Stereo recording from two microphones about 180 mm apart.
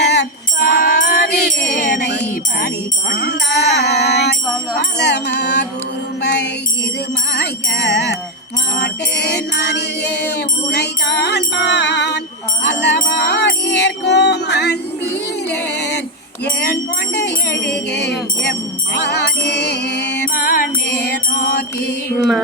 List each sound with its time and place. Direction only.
0.0 s music: 70° left (ahead or behind)
0.6 s music: 55° left (ahead or behind)
3.1 s a sound: 65° left (ahead or behind)
4.9 s music: 70° left (ahead or behind)
7.3 s music: 70° left (ahead or behind)
17.2 s wind chime: 70° left (ahead or behind)
18.9 s music: 70° left (ahead or behind)
20.1 s mantra: 55° left (ahead or behind)